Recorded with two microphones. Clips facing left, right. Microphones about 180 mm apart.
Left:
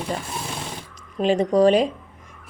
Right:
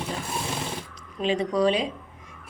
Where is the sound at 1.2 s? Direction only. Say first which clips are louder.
Left 6 dB; 45° left (ahead or behind).